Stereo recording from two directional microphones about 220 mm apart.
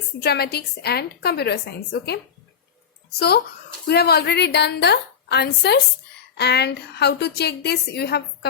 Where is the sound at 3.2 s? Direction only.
45° left (ahead or behind).